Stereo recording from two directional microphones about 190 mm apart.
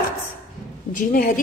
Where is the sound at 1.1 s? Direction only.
45° left (ahead or behind).